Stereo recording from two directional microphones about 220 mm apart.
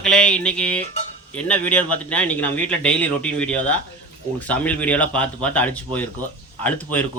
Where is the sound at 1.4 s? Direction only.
5° left (ahead or behind).